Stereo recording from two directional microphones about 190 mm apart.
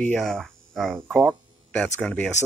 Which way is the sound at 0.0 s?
5° left (ahead or behind).